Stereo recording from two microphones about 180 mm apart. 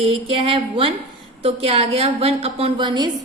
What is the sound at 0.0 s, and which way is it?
A woman's voice, 30° right (ahead or behind).